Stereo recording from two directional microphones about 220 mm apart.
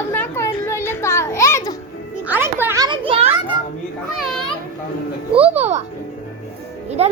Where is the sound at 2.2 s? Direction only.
10° right (ahead or behind); by 3.3 s 25° right (ahead or behind).